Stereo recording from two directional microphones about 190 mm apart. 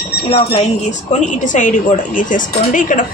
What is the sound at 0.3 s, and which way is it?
A woman's voice, 30° left (ahead or behind).